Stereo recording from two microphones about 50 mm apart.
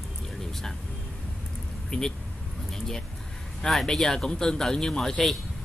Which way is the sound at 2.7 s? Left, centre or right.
Centre.